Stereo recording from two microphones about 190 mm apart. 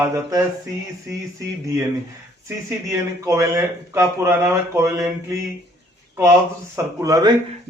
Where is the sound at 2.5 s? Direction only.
15° right (ahead or behind).